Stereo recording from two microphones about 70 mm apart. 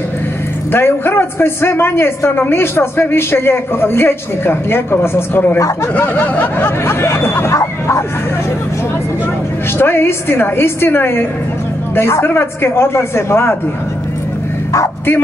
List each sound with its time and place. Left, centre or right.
0.7 s a man's voice: left
9.8 s a man's voice: left